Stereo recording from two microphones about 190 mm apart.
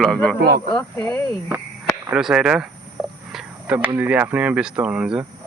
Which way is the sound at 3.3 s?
10° right (ahead or behind).